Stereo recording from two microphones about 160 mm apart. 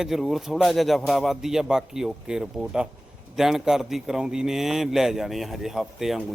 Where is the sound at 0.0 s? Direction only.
Centre (ahead or behind).